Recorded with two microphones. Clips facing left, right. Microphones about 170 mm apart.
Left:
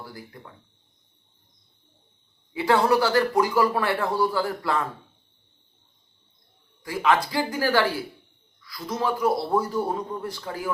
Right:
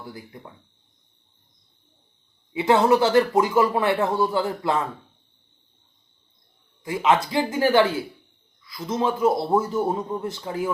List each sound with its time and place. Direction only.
0.0 s speech: 20° right (ahead or behind)
2.5 s speech: 20° right (ahead or behind)
6.8 s speech: 20° right (ahead or behind)